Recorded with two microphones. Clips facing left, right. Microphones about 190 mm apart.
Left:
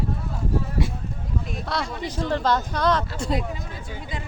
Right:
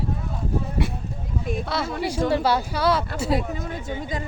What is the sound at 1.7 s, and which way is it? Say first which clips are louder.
Speech: left 1 dB; 5° right (ahead or behind).